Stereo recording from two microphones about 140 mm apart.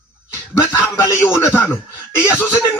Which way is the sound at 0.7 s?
15° left (ahead or behind).